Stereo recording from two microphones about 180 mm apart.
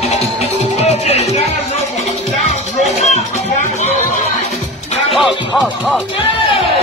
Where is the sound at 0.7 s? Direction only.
35° left (ahead or behind).